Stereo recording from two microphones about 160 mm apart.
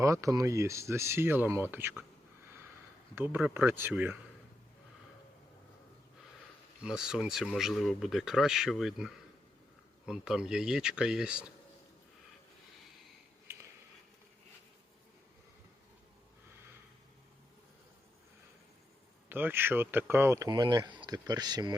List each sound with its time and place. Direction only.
0.0 s speech: 20° right (ahead or behind)
3.2 s speech: 10° right (ahead or behind)
6.8 s speech: 5° right (ahead or behind)
13.5 s a sound: 15° right (ahead or behind)
19.3 s speech: 10° right (ahead or behind)